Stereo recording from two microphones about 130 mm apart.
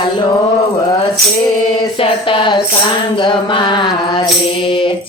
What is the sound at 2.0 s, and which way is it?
Mantra, 40° left (ahead or behind).